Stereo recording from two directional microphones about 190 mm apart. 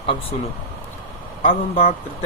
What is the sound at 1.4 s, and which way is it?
Speech, 30° left (ahead or behind).